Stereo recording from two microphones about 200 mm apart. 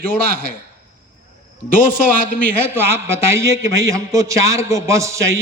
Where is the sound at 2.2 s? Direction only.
40° left (ahead or behind).